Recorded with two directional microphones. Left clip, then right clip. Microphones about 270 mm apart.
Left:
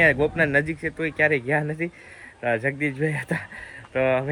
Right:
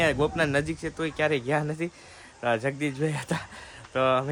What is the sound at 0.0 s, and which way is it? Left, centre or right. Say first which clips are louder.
Speech: left 5 dB; centre.